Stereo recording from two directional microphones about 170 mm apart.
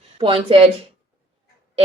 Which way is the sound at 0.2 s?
30° right (ahead or behind).